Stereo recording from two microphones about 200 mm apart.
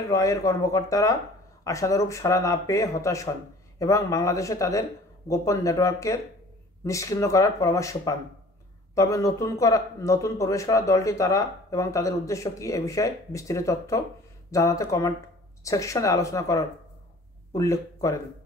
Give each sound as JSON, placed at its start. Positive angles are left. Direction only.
{"t": 0.1, "sound": "speech", "side_deg": 15}